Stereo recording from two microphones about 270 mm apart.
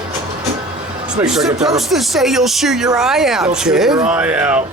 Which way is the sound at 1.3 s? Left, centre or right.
Centre.